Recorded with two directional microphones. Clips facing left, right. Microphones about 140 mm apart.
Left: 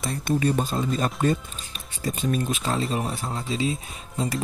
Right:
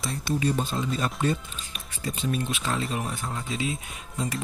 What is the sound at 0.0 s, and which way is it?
Speech, 50° left (ahead or behind).